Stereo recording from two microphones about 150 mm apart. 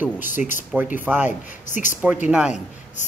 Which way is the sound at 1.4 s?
55° left (ahead or behind).